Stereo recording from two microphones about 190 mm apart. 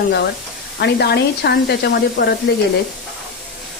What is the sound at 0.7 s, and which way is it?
Speech, 60° left (ahead or behind).